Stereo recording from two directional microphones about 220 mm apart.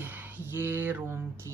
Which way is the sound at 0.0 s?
10° right (ahead or behind).